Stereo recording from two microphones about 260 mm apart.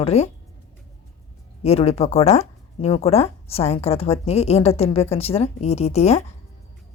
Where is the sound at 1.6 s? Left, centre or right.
Left.